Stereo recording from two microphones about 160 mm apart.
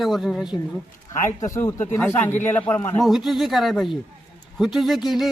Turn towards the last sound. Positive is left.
turn(degrees=0)  # may be behind; listen again after turning